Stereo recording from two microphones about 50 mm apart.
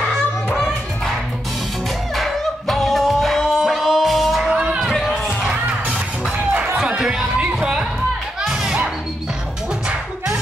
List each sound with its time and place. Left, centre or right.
0.1 s music: centre
2.1 s a capella: centre
4.5 s music: centre
4.8 s a sound: centre
5.5 s music: right
9.8 s music: centre